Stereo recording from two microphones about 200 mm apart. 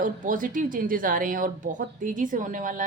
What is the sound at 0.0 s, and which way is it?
Speech, 45° right (ahead or behind).